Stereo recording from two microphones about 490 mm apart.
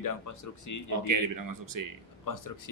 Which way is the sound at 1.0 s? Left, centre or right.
Right.